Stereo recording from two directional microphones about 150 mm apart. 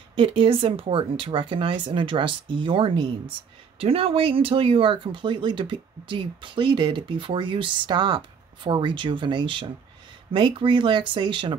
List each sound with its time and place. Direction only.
0.1 s speech: 35° right (ahead or behind)